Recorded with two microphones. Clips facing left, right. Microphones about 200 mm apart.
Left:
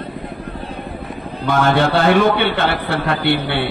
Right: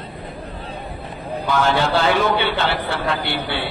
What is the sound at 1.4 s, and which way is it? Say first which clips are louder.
A man's voice: left 4 dB; 55° left (ahead or behind).